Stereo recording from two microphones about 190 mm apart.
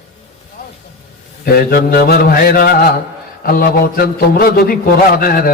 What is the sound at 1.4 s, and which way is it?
A man's voice, 50° left (ahead or behind).